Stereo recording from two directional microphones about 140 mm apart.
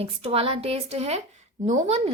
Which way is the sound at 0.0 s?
45° right (ahead or behind).